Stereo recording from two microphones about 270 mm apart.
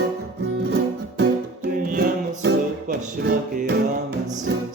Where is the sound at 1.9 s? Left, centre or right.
Right.